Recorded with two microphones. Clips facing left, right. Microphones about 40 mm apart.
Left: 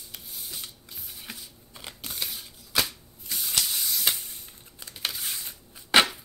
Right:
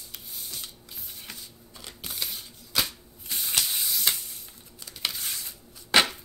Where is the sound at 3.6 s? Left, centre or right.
Centre.